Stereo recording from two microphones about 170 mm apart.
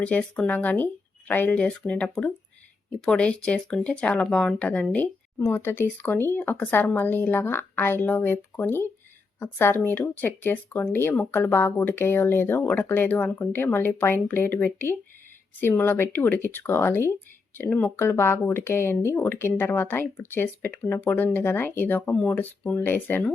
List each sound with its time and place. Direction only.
0.0 s speech: 5° left (ahead or behind)